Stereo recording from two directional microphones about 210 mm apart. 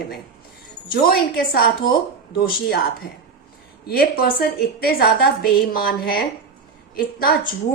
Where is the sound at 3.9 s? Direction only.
45° left (ahead or behind).